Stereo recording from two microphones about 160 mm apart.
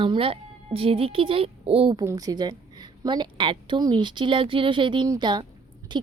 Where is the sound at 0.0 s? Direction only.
35° right (ahead or behind).